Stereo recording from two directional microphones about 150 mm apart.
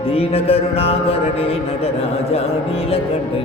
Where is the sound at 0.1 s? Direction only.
40° left (ahead or behind).